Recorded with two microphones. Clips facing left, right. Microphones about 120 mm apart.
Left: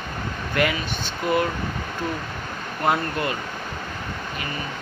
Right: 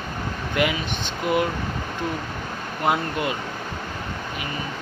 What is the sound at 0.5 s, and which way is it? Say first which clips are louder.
Speech: even; 15° right (ahead or behind).